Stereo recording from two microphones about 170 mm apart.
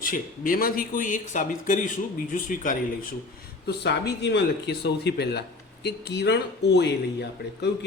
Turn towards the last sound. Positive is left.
turn(degrees=80)